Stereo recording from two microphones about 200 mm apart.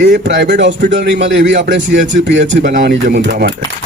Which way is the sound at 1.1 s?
65° right (ahead or behind).